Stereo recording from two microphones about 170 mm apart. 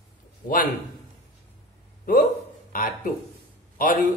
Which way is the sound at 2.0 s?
60° left (ahead or behind).